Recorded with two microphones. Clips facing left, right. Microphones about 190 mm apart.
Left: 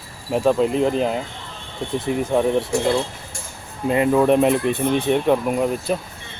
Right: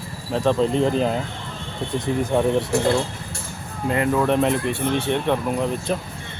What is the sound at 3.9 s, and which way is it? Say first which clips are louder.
Speech: left 4 dB; 20° left (ahead or behind).